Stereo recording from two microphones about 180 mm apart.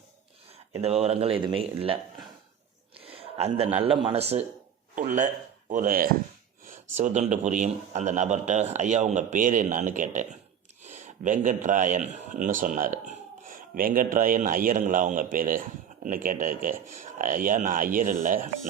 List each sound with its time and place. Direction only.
0.7 s speech: 35° right (ahead or behind)
3.0 s a sound: 35° right (ahead or behind)
3.8 s speech: 30° right (ahead or behind)
4.9 s a man's voice: 45° right (ahead or behind)